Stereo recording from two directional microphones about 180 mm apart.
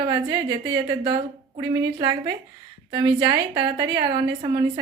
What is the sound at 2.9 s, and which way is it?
A woman's voice, 25° right (ahead or behind).